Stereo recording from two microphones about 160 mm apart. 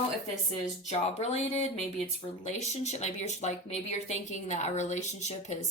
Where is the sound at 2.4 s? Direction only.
45° left (ahead or behind).